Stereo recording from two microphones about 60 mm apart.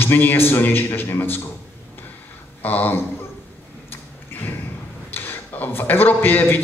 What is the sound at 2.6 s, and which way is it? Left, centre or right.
Speech, left.